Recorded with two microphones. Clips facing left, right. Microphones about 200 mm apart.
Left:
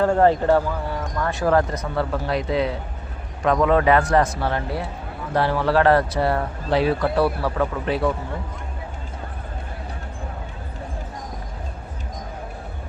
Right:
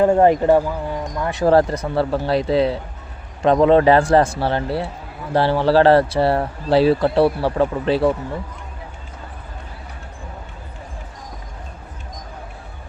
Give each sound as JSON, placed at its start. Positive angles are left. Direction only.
{"t": 0.0, "sound": "speech", "side_deg": -15}
{"t": 1.5, "sound": "speech", "side_deg": -30}